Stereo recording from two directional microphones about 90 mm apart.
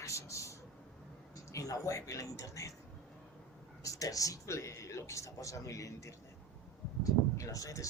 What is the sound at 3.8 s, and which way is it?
Speech, 40° left (ahead or behind).